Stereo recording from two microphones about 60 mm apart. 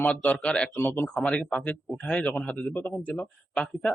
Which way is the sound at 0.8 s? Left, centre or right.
Left.